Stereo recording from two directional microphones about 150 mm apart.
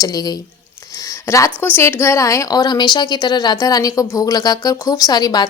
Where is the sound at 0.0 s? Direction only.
25° left (ahead or behind).